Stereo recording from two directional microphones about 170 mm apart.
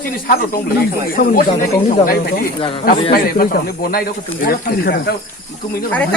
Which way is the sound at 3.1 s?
60° left (ahead or behind).